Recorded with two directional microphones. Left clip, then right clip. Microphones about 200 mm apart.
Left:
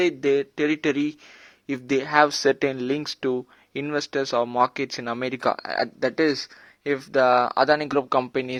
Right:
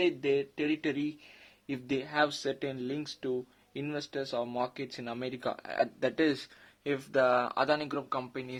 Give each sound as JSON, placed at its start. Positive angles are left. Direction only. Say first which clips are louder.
{"t": 0.0, "sound": "speech", "louder": "left 8 dB", "side_deg": 30}
{"t": 7.9, "sound": "speech", "louder": "left 13 dB", "side_deg": 40}